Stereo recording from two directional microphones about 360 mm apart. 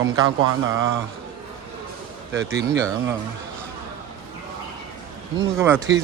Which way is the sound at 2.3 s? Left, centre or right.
Centre.